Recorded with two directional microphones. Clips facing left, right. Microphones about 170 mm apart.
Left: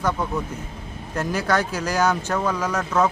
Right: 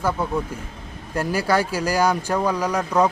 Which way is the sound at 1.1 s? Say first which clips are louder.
Right 2 dB; 10° right (ahead or behind).